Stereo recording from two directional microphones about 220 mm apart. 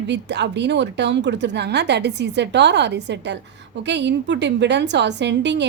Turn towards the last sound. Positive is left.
turn(degrees=-50)  # may be behind; listen again after turning